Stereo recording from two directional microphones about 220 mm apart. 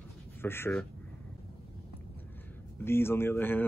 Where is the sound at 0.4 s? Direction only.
10° left (ahead or behind).